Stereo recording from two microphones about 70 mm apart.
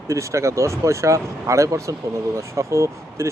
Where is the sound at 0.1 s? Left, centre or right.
Right.